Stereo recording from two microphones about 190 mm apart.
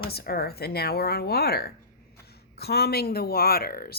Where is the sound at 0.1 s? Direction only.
55° left (ahead or behind).